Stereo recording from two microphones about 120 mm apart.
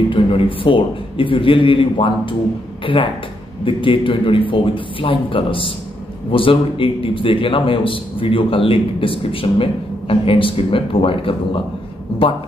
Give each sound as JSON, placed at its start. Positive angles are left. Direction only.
{"t": 0.1, "sound": "a man's voice", "side_deg": 50}